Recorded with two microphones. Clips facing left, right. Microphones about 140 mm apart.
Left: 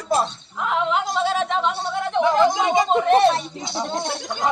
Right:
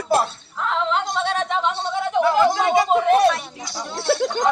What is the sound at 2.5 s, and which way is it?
Chatter, 15° left (ahead or behind).